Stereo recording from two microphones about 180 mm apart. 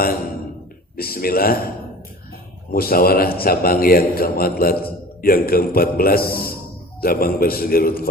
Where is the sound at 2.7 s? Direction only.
55° left (ahead or behind).